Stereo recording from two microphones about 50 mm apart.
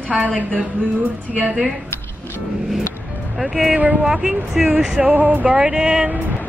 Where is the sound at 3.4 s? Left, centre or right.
Centre.